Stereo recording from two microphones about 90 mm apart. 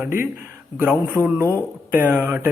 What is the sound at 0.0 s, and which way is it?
Speech, 25° right (ahead or behind).